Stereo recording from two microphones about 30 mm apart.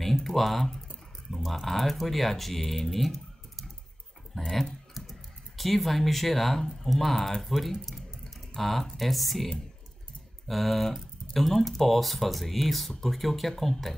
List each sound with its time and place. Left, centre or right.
0.0 s typing: centre
1.3 s speech: centre
4.3 s speech: centre
5.0 s computer keyboard: centre
5.6 s speech: centre
10.5 s speech: centre